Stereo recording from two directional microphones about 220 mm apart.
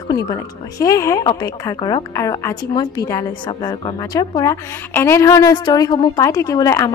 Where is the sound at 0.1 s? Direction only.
15° left (ahead or behind).